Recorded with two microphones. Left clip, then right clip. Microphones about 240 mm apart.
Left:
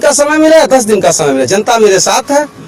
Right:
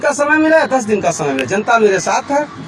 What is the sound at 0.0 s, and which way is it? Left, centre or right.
A man's voice, left.